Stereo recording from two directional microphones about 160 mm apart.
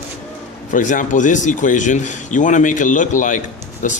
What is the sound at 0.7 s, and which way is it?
Speech, 55° left (ahead or behind).